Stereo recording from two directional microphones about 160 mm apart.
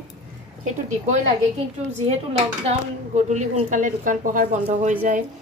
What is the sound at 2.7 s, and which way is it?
A woman's voice, 45° right (ahead or behind).